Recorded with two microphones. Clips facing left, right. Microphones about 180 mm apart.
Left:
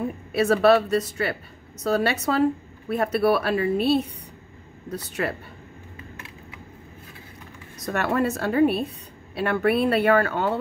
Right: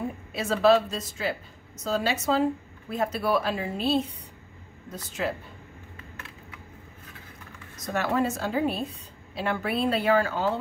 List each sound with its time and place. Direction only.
0.3 s a woman's voice: 65° left (ahead or behind)
7.8 s a woman's voice: 60° left (ahead or behind)